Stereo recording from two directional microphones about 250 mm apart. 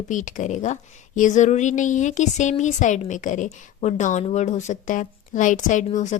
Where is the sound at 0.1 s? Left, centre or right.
Left.